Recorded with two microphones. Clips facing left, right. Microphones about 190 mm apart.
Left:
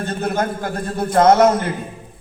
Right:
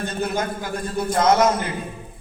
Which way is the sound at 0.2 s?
55° left (ahead or behind).